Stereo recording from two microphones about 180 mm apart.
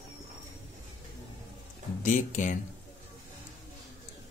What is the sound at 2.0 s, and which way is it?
Speech, 45° left (ahead or behind).